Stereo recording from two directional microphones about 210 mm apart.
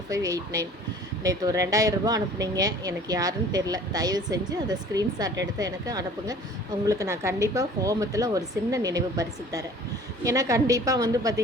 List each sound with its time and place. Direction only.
0.1 s speech: 15° right (ahead or behind)